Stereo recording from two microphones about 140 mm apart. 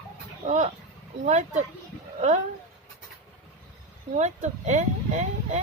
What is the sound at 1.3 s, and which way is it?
Speech, 55° right (ahead or behind).